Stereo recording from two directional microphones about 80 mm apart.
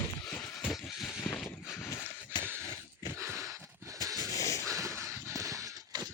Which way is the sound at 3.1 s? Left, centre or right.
Right.